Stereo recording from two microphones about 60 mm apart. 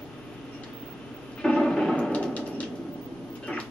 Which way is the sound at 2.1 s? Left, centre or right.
Left.